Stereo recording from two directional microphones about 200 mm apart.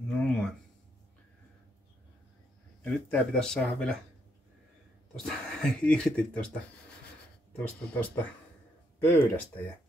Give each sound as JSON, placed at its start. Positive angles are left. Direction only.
{"t": 0.1, "sound": "a sound", "side_deg": 5}
{"t": 2.8, "sound": "speech", "side_deg": 5}
{"t": 5.2, "sound": "speech", "side_deg": 5}
{"t": 7.5, "sound": "speech", "side_deg": 10}